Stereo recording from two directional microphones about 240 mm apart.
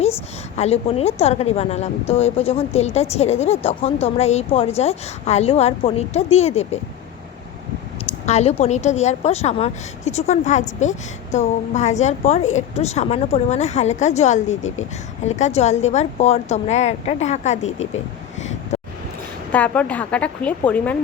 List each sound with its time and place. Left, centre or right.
0.5 s a woman's voice: left
8.3 s a woman's voice: left
18.7 s a sound: left
19.5 s a woman's voice: centre